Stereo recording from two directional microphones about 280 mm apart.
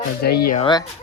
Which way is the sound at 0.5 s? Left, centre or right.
Centre.